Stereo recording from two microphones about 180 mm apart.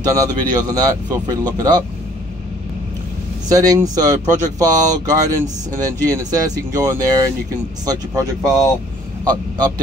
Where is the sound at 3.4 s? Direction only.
20° right (ahead or behind).